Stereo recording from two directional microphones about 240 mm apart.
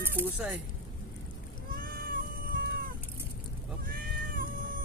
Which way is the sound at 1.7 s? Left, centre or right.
Right.